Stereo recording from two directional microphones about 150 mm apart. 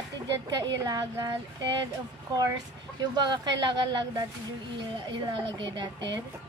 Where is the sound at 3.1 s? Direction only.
30° right (ahead or behind).